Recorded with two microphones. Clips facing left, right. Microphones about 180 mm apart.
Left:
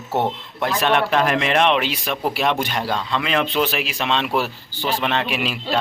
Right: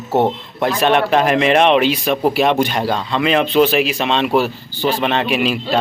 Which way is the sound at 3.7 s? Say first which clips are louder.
Right 6 dB; centre (ahead or behind).